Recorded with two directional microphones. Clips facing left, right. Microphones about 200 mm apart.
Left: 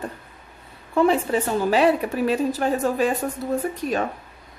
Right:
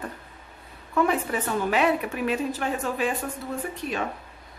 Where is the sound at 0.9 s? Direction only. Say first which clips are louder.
Left 5 dB; 30° left (ahead or behind).